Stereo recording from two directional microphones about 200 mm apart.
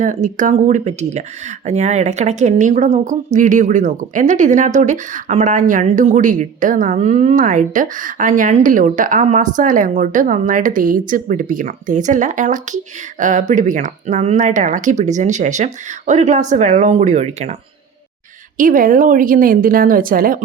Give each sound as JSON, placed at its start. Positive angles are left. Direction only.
{"t": 0.0, "sound": "a woman's voice", "side_deg": -40}